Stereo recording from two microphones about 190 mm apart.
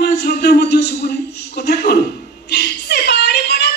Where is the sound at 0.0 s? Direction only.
55° left (ahead or behind).